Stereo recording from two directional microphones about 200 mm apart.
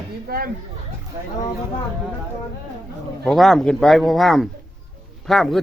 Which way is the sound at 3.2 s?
Centre (ahead or behind).